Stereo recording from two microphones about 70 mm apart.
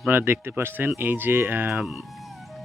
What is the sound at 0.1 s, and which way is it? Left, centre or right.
Speech, right.